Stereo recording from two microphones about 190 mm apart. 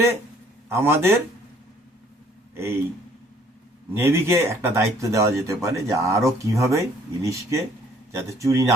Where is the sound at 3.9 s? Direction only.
15° right (ahead or behind).